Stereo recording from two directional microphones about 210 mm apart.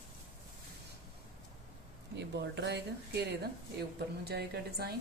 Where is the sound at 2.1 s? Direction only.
55° right (ahead or behind).